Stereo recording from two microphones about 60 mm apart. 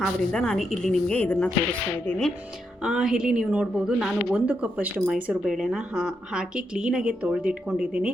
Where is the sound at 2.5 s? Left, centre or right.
Centre.